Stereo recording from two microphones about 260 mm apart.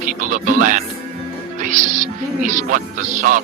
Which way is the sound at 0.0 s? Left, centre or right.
Right.